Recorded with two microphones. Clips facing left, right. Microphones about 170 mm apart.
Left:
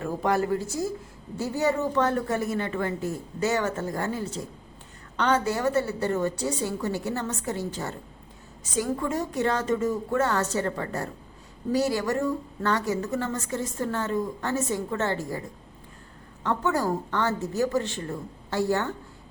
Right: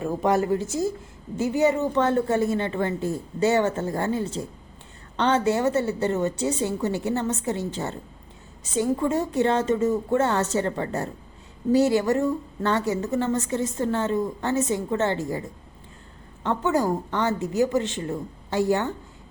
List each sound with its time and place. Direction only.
0.0 s a woman's voice: 20° right (ahead or behind)
16.4 s a woman's voice: 20° right (ahead or behind)